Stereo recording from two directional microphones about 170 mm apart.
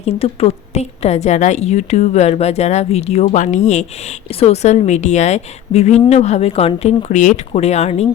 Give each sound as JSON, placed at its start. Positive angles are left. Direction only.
{"t": 0.0, "sound": "a woman's voice", "side_deg": 35}